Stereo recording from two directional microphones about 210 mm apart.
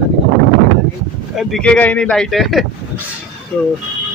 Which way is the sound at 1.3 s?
5° left (ahead or behind).